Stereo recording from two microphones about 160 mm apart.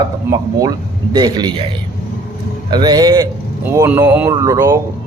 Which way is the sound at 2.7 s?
25° right (ahead or behind).